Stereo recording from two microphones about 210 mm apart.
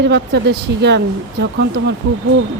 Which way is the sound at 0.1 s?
55° right (ahead or behind).